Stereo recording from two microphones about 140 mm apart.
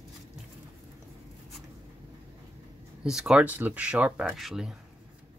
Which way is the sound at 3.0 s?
5° right (ahead or behind).